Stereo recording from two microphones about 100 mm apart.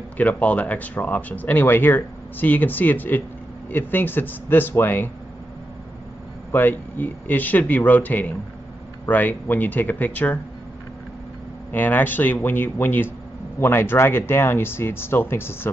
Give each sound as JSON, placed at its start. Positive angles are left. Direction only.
{"t": 0.2, "sound": "speech", "side_deg": 15}
{"t": 6.5, "sound": "speech", "side_deg": 20}
{"t": 11.7, "sound": "speech", "side_deg": 20}